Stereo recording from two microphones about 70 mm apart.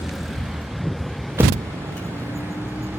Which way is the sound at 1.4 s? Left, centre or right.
Right.